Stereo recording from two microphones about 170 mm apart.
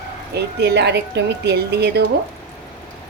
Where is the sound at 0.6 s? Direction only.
80° right.